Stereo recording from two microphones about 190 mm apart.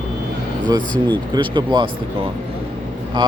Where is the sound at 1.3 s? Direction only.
25° right (ahead or behind).